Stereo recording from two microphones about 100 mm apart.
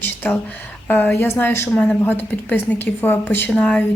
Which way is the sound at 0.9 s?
20° left (ahead or behind).